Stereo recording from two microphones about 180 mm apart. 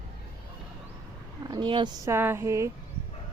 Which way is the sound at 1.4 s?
25° right (ahead or behind).